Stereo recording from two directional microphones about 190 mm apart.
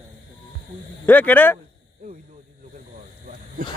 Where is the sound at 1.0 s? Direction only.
10° left (ahead or behind).